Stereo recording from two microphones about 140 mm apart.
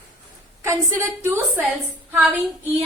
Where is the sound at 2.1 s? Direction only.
10° right (ahead or behind).